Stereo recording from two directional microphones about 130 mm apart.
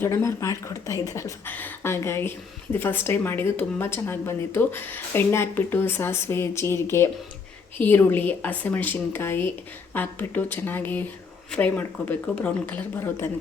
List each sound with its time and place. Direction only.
0.0 s a woman's voice: 20° left (ahead or behind)